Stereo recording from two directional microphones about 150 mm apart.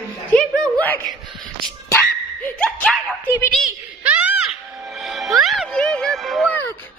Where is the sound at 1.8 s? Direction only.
15° left (ahead or behind).